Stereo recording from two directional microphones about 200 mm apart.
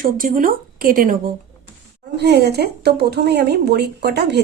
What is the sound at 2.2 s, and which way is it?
A woman's voice, 55° right (ahead or behind).